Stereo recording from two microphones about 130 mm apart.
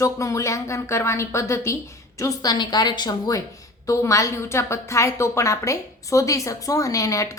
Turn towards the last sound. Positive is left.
turn(degrees=25)  # may be behind; listen again after turning